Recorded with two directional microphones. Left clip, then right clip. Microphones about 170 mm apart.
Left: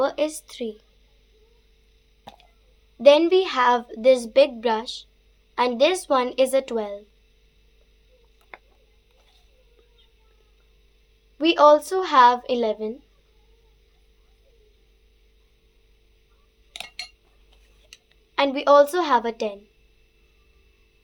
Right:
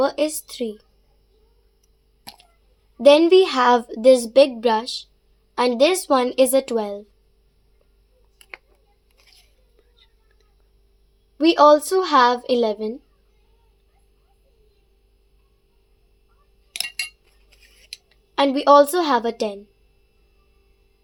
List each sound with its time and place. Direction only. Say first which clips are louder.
0.0 s a woman's voice: right 3 dB; 60° right (ahead or behind)
3.0 s a woman's voice: right 3 dB; 60° right (ahead or behind)
11.3 s a woman's voice: right 2 dB; 50° right (ahead or behind)
16.7 s cutlery: right 8 dB; 10° left (ahead or behind)
18.3 s a woman's voice: right 3 dB; 55° right (ahead or behind)